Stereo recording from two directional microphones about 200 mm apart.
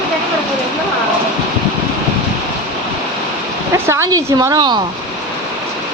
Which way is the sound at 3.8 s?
15° right (ahead or behind).